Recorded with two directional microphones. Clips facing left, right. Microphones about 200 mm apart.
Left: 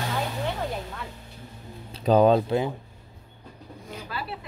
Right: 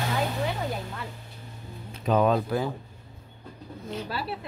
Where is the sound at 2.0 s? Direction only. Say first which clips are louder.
Left 4 dB; 35° left (ahead or behind).